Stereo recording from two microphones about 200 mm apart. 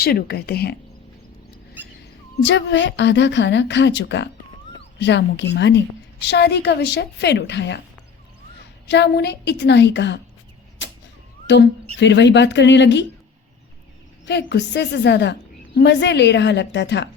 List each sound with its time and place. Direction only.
0.0 s a woman's voice: 50° left (ahead or behind)
2.4 s a woman's voice: 65° left (ahead or behind)
8.9 s a woman's voice: 55° left (ahead or behind)
10.8 s arrow: 65° left (ahead or behind)
11.5 s a woman's voice: 60° left (ahead or behind)
14.3 s a woman's voice: 55° left (ahead or behind)